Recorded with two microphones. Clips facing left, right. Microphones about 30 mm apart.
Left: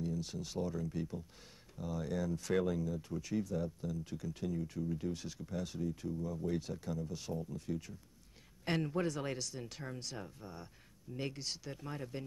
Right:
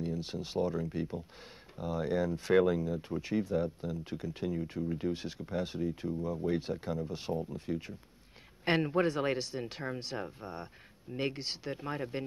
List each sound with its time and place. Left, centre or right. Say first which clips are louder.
0.0 s speech: right 3 dB; right